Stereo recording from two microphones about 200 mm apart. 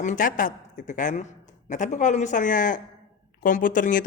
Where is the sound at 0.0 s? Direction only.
40° left (ahead or behind).